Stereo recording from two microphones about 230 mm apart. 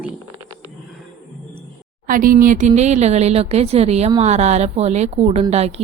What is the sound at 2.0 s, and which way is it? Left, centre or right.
Speech, right.